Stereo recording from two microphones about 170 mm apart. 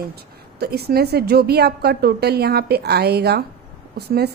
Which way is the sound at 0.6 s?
70° right (ahead or behind).